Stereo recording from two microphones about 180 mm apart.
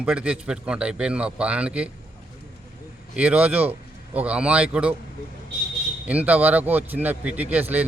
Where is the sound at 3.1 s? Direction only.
5° right (ahead or behind).